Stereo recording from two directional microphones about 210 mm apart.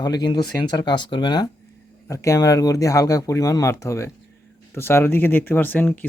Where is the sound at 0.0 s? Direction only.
20° left (ahead or behind).